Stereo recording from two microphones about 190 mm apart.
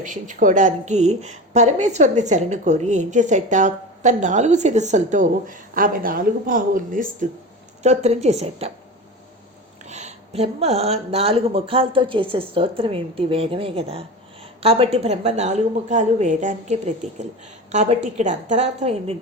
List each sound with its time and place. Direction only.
0.0 s a woman's voice: 45° right (ahead or behind)
9.8 s a woman's voice: 35° right (ahead or behind)